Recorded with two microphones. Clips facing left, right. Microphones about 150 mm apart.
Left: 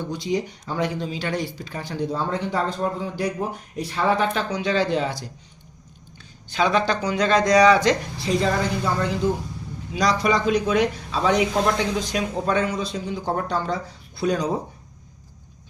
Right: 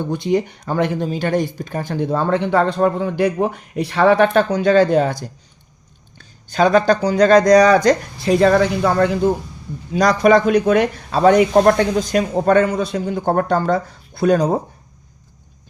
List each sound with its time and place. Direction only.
0.0 s speech: 55° right (ahead or behind)
4.4 s speech: 50° right (ahead or behind); by 9.3 s 65° right (ahead or behind)
9.9 s speech: 50° right (ahead or behind)